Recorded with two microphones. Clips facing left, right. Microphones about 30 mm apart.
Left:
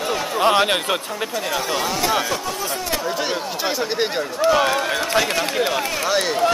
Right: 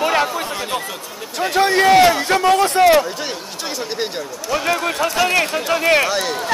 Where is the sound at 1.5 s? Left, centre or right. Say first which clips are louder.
Right 13 dB; right.